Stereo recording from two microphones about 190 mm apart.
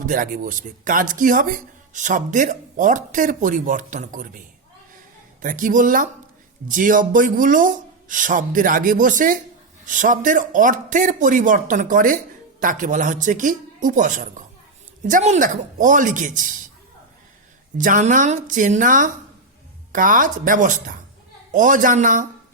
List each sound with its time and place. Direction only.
0.0 s speech: 45° right (ahead or behind)
5.4 s speech: 45° right (ahead or behind)
17.7 s speech: 45° right (ahead or behind)